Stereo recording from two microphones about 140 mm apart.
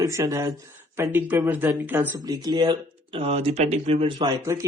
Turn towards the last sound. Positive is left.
turn(degrees=-20)  # may be behind; listen again after turning